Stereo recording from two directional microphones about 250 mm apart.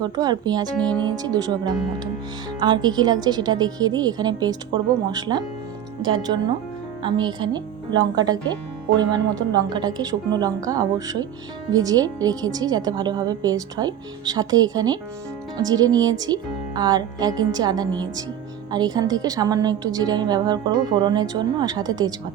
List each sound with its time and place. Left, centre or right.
0.0 s a woman's voice: centre
0.8 s speech: centre
1.0 s a woman's voice: centre
2.6 s a woman's voice: centre